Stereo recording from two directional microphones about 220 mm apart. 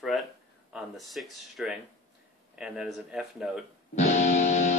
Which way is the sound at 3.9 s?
30° left (ahead or behind).